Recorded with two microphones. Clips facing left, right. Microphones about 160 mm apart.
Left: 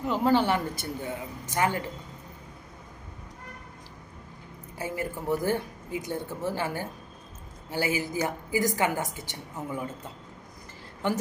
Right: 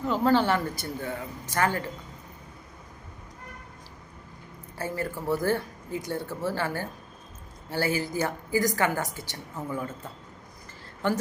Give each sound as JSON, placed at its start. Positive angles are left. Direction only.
{"t": 0.0, "sound": "speech", "side_deg": 15}
{"t": 4.8, "sound": "speech", "side_deg": 15}